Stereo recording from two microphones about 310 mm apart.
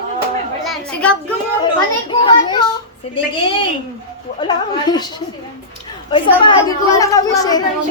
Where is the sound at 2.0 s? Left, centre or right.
Centre.